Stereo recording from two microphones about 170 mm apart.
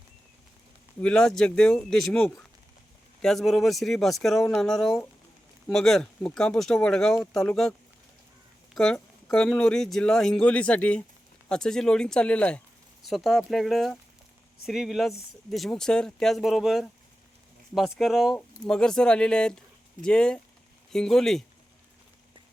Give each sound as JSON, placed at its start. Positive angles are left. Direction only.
{"t": 1.0, "sound": "speech", "side_deg": 5}
{"t": 8.7, "sound": "speech", "side_deg": 0}